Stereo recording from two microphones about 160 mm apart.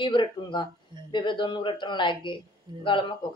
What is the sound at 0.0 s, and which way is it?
A man's voice, 30° left (ahead or behind).